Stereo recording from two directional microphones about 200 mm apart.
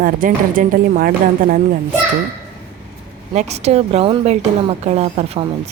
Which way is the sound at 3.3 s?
35° right (ahead or behind).